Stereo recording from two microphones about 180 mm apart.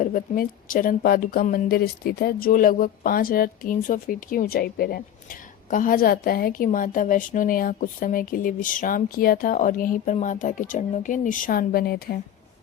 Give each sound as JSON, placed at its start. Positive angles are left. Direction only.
{"t": 0.0, "sound": "a woman's voice", "side_deg": 50}